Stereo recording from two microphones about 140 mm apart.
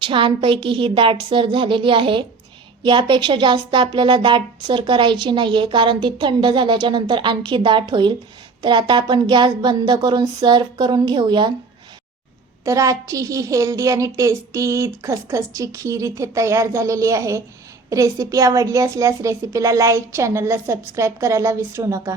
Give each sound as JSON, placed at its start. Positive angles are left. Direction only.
{"t": 0.0, "sound": "speech", "side_deg": -35}
{"t": 12.6, "sound": "a woman's voice", "side_deg": -25}